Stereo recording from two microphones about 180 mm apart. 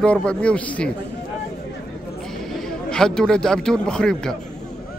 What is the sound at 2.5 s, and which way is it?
A man's voice, 5° left (ahead or behind).